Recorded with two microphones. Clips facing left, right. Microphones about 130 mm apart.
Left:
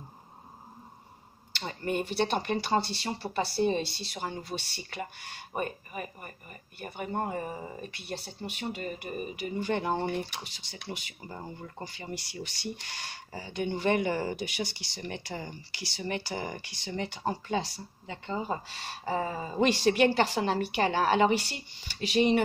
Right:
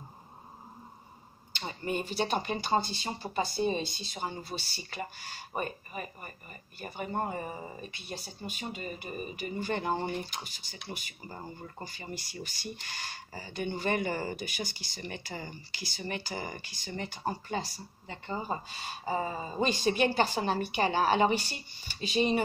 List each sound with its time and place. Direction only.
1.5 s a sound: 65° left (ahead or behind)
1.9 s speech: 55° left (ahead or behind)
3.6 s speech: 15° right (ahead or behind)
3.9 s speech: 65° left (ahead or behind)